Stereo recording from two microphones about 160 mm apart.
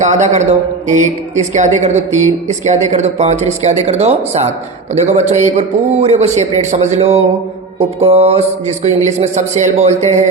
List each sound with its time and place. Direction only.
0.0 s speech: 45° right (ahead or behind)